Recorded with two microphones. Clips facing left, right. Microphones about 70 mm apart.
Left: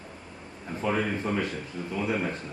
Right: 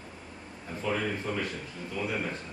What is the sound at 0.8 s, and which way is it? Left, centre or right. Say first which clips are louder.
Speech: left 3 dB; left.